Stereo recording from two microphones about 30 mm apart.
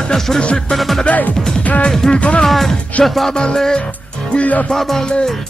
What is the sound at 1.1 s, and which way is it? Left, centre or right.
Speech, left.